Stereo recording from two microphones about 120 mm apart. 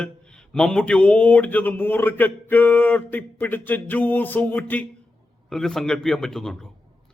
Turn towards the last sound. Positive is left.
turn(degrees=5)  # may be behind; listen again after turning